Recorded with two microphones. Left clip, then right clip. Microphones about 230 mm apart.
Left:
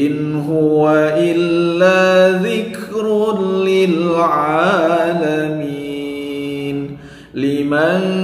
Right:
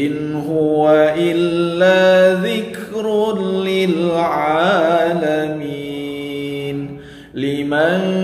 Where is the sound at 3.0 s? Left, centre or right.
Centre.